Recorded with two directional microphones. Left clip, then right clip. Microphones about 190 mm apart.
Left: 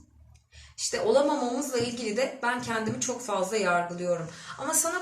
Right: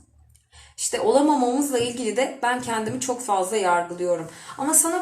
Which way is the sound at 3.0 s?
40° right (ahead or behind).